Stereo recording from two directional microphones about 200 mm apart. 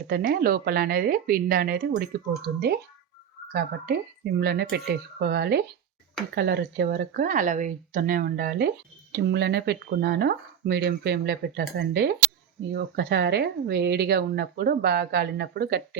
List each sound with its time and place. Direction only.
0.1 s a woman's voice: 50° right (ahead or behind)